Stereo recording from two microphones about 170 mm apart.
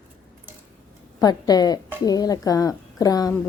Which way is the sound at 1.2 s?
20° left (ahead or behind).